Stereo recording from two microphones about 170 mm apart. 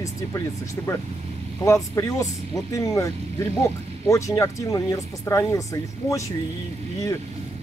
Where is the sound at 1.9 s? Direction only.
20° left (ahead or behind).